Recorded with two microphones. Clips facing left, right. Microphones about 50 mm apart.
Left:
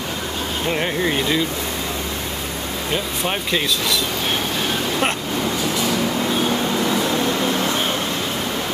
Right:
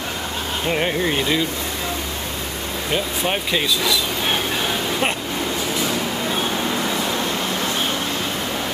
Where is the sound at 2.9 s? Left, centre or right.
Centre.